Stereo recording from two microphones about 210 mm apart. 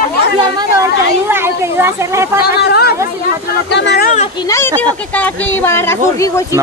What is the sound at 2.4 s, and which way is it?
Speech, 50° left (ahead or behind).